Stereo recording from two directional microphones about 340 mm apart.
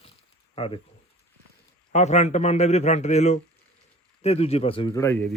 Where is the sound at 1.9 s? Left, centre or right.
Centre.